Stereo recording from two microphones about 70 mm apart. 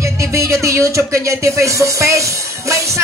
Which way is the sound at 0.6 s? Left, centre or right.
Right.